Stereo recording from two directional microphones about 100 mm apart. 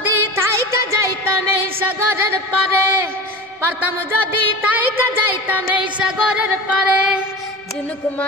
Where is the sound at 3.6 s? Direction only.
20° right (ahead or behind).